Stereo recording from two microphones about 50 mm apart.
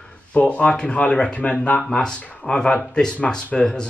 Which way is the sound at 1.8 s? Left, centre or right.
Centre.